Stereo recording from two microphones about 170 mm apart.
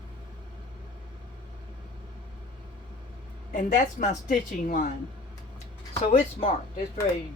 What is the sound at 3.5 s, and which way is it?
A woman's voice, 50° left (ahead or behind).